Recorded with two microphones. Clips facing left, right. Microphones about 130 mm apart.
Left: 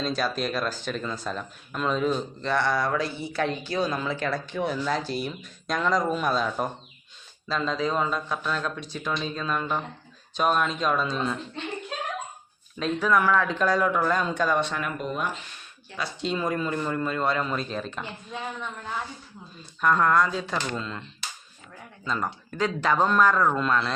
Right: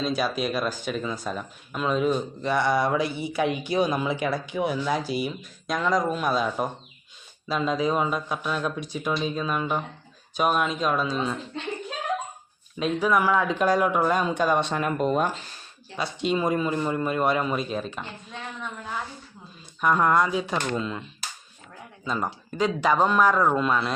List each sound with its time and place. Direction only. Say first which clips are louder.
0.0 s speech: right 2 dB; 10° right (ahead or behind)
12.8 s speech: right 1 dB; 10° right (ahead or behind); by 16.0 s 35° right (ahead or behind)
16.0 s speech: right 3 dB; 20° right (ahead or behind); by 18.9 s centre (ahead or behind)
19.8 s speech: even; 15° right (ahead or behind)